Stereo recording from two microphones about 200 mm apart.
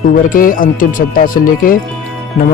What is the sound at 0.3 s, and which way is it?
Speech, 45° left (ahead or behind).